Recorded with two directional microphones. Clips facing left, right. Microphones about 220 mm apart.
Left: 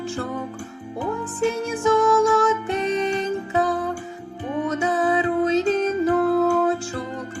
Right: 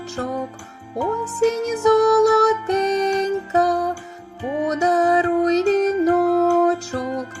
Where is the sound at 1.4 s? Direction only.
40° right (ahead or behind).